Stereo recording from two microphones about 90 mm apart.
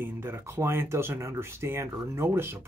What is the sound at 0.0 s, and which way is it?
Speech, 25° right (ahead or behind).